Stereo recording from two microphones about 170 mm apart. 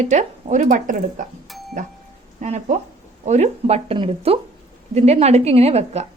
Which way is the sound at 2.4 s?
45° right (ahead or behind).